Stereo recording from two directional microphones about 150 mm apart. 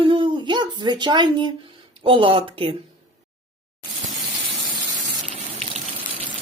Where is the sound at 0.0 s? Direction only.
35° right (ahead or behind).